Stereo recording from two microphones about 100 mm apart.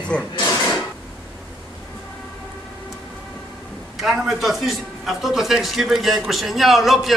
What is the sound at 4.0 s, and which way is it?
A man's voice, centre (ahead or behind).